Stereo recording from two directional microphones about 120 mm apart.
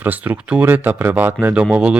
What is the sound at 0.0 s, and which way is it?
A man's voice, 15° right (ahead or behind).